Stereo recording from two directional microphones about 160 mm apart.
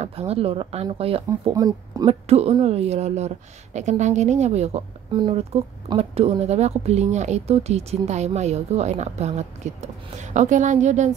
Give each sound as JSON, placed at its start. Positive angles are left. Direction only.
{"t": 0.0, "sound": "a woman's voice", "side_deg": -40}
{"t": 1.5, "sound": "speech", "side_deg": -25}
{"t": 2.0, "sound": "a woman's voice", "side_deg": -40}